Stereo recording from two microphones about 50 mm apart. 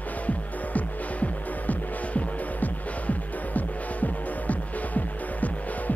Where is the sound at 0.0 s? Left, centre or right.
Left.